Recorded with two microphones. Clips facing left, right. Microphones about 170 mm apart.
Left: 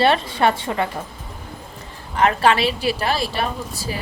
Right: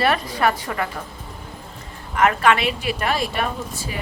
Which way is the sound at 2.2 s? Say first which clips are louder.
Left 1 dB; 30° left (ahead or behind).